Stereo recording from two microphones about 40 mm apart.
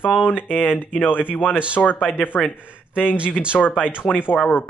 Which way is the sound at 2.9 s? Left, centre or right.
Left.